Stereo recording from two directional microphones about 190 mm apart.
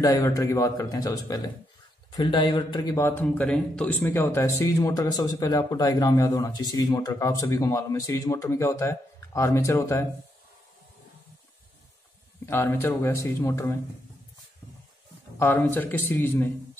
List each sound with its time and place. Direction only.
0.0 s a man's voice: 15° left (ahead or behind)
12.4 s a man's voice: 10° left (ahead or behind)
15.3 s a man's voice: 10° left (ahead or behind)